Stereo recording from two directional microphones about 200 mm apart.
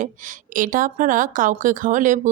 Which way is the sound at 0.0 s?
40° right (ahead or behind).